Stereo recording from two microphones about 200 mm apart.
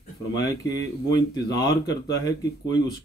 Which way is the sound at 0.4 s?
20° left (ahead or behind).